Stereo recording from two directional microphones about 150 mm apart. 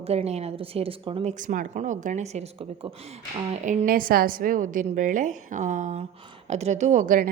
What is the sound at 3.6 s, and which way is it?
A woman's voice, 60° right (ahead or behind).